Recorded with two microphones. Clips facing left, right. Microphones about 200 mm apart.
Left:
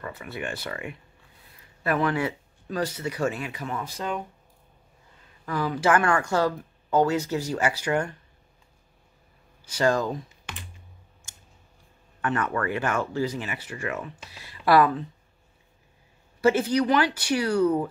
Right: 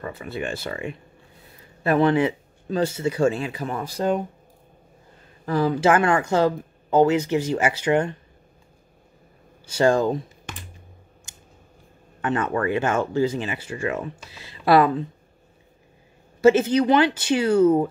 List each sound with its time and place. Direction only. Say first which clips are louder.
0.0 s speech: right 4 dB; 25° right (ahead or behind)
5.4 s speech: right 6 dB; 30° right (ahead or behind)
9.7 s speech: right 5 dB; 30° right (ahead or behind)
12.2 s speech: right 4 dB; 25° right (ahead or behind)
16.3 s speech: right 5 dB; 25° right (ahead or behind)